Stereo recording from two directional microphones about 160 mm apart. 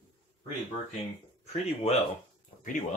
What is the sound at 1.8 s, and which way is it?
Speech, 40° left (ahead or behind).